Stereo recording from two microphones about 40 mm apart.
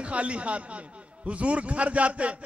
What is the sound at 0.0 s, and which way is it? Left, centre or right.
A man's voice, right.